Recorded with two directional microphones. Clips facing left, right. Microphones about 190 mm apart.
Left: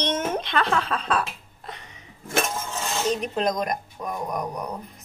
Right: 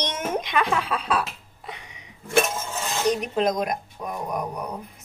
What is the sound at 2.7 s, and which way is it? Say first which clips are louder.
A woman's voice: right 2 dB; 10° right (ahead or behind).